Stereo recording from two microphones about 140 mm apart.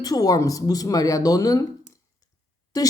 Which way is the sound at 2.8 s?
25° left (ahead or behind).